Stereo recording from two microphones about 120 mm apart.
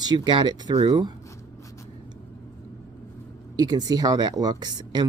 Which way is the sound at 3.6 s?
35° right (ahead or behind).